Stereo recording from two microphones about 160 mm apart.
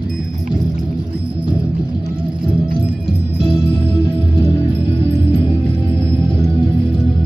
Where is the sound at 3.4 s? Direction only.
30° left (ahead or behind).